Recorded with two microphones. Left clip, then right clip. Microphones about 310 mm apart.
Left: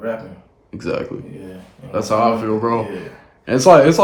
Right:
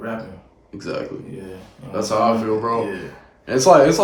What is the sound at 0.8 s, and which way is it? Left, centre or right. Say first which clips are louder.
Speech: left 4 dB; centre.